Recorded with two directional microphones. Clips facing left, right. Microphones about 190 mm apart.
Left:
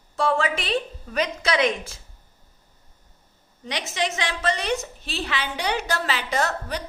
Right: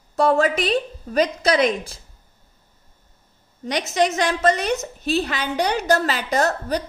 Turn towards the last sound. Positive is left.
turn(degrees=-40)  # may be behind; listen again after turning